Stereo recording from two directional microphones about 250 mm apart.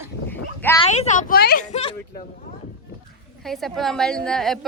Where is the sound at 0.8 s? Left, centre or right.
Left.